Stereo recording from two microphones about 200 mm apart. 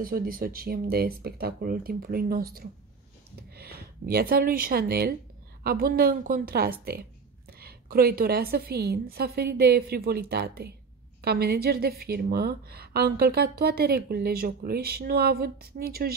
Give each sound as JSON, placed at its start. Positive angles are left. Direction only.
{"t": 0.0, "sound": "a woman's voice", "side_deg": -45}
{"t": 3.5, "sound": "a woman's voice", "side_deg": -50}